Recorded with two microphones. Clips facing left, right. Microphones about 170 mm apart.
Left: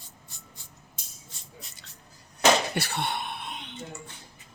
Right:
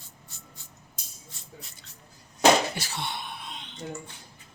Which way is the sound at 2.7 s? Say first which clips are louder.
Left 5 dB; 60° left (ahead or behind).